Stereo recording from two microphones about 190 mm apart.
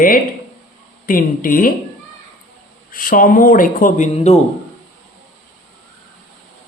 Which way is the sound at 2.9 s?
50° left (ahead or behind).